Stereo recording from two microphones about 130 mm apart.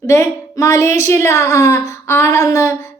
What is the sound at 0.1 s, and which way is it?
A woman's voice, 25° left (ahead or behind).